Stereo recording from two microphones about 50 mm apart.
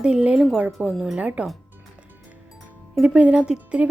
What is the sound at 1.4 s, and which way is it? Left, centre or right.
Speech, right.